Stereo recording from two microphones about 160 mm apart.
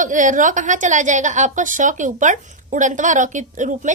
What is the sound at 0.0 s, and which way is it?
A woman's voice, 55° right (ahead or behind).